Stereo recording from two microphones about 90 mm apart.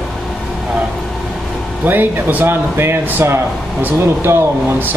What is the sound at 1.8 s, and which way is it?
Speech, 20° right (ahead or behind).